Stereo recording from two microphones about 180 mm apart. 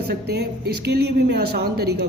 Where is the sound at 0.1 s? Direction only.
60° right (ahead or behind).